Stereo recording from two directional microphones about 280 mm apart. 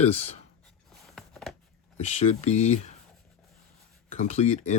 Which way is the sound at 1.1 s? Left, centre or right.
Centre.